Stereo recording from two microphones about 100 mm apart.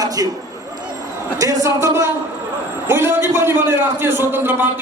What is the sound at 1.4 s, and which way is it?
A man's voice, 35° right (ahead or behind).